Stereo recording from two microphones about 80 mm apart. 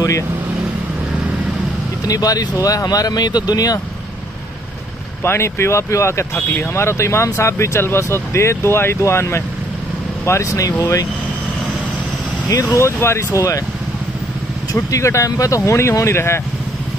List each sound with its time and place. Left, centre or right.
2.0 s speech: left
5.2 s speech: left
12.7 s speech: left
14.8 s speech: left